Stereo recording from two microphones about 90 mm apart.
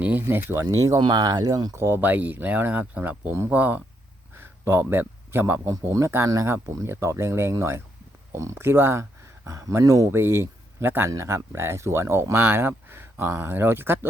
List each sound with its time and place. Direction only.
0.0 s speech: 20° right (ahead or behind)
0.9 s speech: 55° right (ahead or behind)
1.7 s speech: 25° right (ahead or behind)